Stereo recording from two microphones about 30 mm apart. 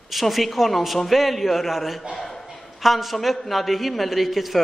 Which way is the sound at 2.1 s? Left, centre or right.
Centre.